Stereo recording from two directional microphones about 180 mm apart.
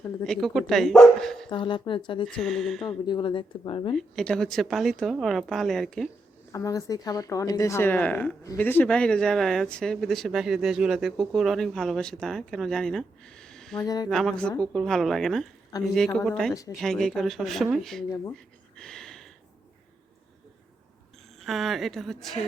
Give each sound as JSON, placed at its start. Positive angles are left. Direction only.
{"t": 0.3, "sound": "speech", "side_deg": 0}
{"t": 1.5, "sound": "speech", "side_deg": 25}
{"t": 2.2, "sound": "speech", "side_deg": 5}
{"t": 3.1, "sound": "speech", "side_deg": 25}
{"t": 3.9, "sound": "speech", "side_deg": 5}
{"t": 6.5, "sound": "speech", "side_deg": 20}
{"t": 13.8, "sound": "speech", "side_deg": 20}
{"t": 14.1, "sound": "speech", "side_deg": 5}
{"t": 18.8, "sound": "a sound", "side_deg": 5}
{"t": 21.4, "sound": "speech", "side_deg": 0}